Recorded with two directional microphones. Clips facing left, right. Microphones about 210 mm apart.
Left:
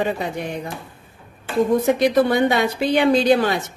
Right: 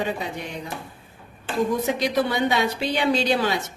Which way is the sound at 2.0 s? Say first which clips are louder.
Left 6 dB; 55° left (ahead or behind).